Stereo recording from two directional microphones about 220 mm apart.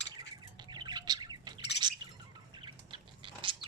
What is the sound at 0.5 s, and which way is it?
Bird, 20° right (ahead or behind).